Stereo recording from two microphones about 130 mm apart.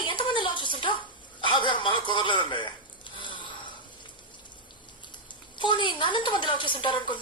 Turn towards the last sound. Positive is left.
turn(degrees=40)  # may be behind; listen again after turning